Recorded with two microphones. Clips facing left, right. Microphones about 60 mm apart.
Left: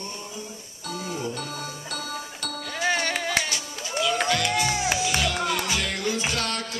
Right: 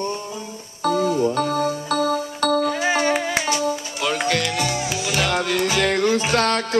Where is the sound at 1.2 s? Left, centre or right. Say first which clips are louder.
Right 12 dB; right.